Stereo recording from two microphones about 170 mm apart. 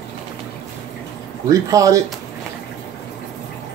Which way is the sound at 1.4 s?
20° right (ahead or behind).